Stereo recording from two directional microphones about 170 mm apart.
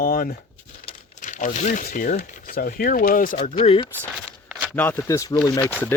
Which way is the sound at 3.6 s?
30° left (ahead or behind).